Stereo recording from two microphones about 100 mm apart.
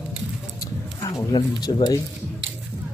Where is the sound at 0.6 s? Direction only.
40° left (ahead or behind).